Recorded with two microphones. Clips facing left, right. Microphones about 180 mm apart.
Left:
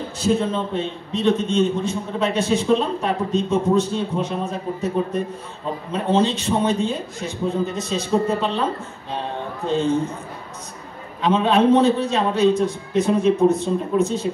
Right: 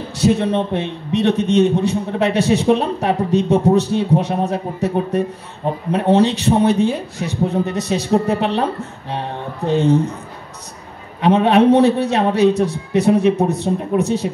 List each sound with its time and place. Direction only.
0.2 s a man's voice: 70° right (ahead or behind)
9.7 s a man's voice: 70° right (ahead or behind)
11.1 s a man's voice: 70° right (ahead or behind)